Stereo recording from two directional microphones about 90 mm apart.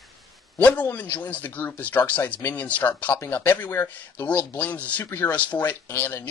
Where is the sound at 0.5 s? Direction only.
15° left (ahead or behind).